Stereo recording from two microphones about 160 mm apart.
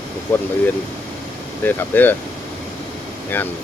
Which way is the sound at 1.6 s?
10° left (ahead or behind).